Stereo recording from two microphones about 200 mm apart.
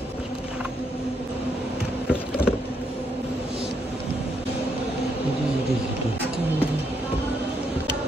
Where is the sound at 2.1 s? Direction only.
5° right (ahead or behind).